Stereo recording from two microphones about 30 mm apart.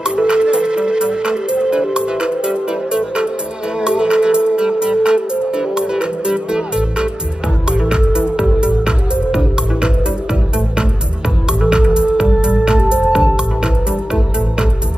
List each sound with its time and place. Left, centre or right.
0.0 s music: right
11.6 s music: right